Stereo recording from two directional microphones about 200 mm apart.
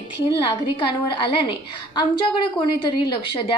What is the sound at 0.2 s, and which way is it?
A woman's voice, 25° left (ahead or behind).